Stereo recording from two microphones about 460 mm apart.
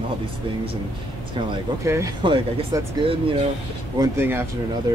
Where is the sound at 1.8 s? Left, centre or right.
Centre.